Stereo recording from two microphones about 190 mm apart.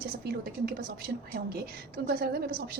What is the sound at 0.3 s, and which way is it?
A woman's voice, 50° right (ahead or behind).